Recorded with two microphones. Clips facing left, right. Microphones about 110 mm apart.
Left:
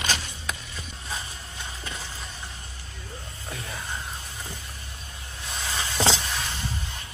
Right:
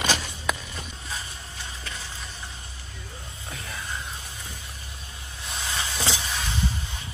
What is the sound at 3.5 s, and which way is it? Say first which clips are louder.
Music: left 1 dB; centre (ahead or behind).